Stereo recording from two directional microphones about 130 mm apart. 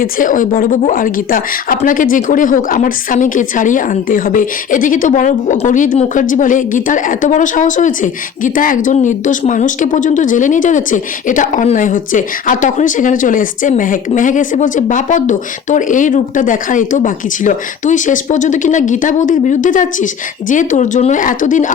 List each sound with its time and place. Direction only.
0.0 s a woman's voice: 90° left